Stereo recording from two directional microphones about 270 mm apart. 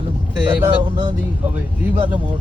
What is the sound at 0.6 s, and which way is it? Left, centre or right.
Speech, centre.